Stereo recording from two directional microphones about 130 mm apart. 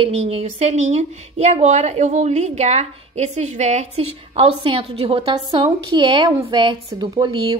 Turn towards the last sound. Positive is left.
turn(degrees=-35)  # may be behind; listen again after turning